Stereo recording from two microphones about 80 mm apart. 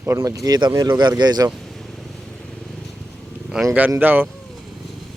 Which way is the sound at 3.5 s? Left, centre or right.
Centre.